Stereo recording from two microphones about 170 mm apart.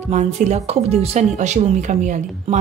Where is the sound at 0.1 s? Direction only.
45° right (ahead or behind).